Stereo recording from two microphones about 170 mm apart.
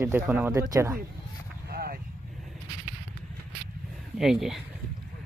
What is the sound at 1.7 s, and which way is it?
Vehicle, 65° right (ahead or behind).